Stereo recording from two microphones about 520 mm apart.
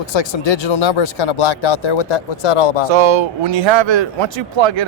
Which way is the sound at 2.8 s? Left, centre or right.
Right.